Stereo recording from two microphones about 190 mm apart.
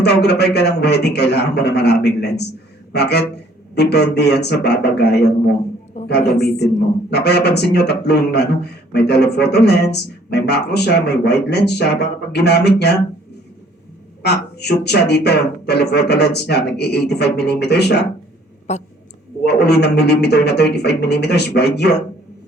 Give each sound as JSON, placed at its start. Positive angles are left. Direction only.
{"t": 0.0, "sound": "speech", "side_deg": 60}
{"t": 6.0, "sound": "a sound", "side_deg": 35}
{"t": 7.1, "sound": "speech", "side_deg": 60}
{"t": 14.2, "sound": "speech", "side_deg": 60}
{"t": 18.7, "sound": "a woman's voice", "side_deg": 35}
{"t": 19.5, "sound": "speech", "side_deg": 60}